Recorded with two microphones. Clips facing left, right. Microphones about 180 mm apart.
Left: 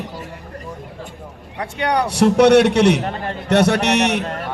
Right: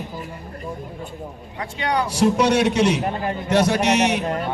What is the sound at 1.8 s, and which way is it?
A man's voice, 65° left (ahead or behind).